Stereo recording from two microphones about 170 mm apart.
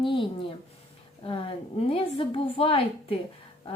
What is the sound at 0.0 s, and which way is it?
Speech, 30° left (ahead or behind).